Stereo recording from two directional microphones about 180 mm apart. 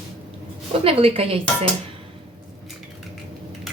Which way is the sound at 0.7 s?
30° right (ahead or behind).